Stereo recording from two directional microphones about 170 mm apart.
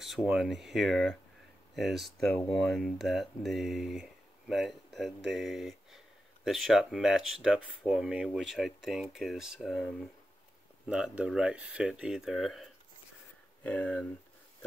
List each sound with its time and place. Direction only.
0.0 s speech: centre (ahead or behind)
13.7 s speech: 5° left (ahead or behind)